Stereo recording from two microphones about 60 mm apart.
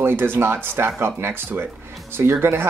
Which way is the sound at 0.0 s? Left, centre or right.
Right.